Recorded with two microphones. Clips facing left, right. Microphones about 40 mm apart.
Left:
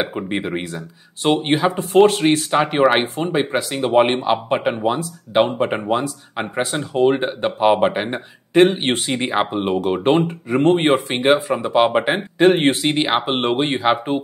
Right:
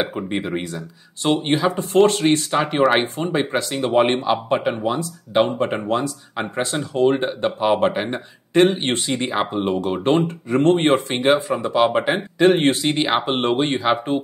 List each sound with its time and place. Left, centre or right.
0.3 s speech: centre